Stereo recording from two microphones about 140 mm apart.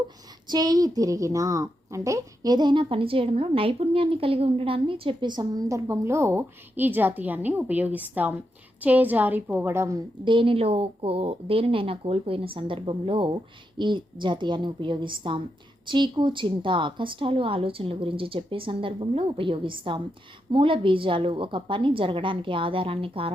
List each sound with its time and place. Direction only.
0.4 s a child's voice: 30° right (ahead or behind)
10.2 s speech: 40° right (ahead or behind)